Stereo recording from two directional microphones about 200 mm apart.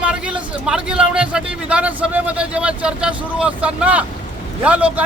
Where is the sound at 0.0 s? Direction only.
5° right (ahead or behind).